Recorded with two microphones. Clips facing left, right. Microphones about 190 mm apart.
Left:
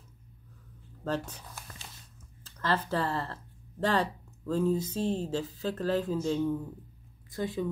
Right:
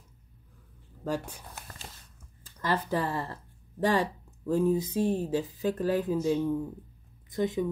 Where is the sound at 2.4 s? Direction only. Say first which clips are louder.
Even; 15° right (ahead or behind).